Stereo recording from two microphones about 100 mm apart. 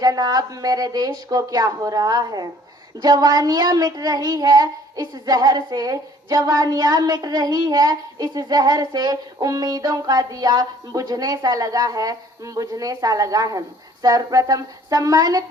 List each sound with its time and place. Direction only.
0.0 s speech: 40° right (ahead or behind)